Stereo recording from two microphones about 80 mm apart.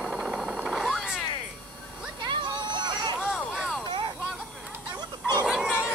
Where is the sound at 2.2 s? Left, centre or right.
Right.